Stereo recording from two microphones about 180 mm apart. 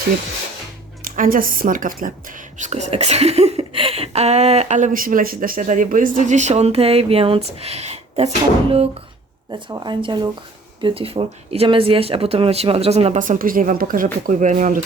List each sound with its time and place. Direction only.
1.0 s a woman's voice: 50° right (ahead or behind)
2.6 s speech: 40° right (ahead or behind)
9.5 s speech: 25° right (ahead or behind); by 14.8 s 45° right (ahead or behind)